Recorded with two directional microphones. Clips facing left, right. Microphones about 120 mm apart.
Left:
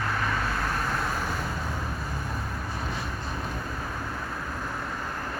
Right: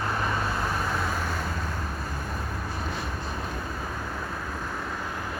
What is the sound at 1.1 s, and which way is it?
Vehicle, 5° left (ahead or behind).